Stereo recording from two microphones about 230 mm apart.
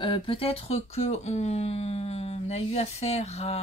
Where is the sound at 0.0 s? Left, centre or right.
Left.